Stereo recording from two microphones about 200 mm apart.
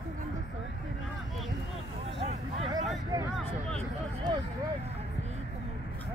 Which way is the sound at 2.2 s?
30° right (ahead or behind).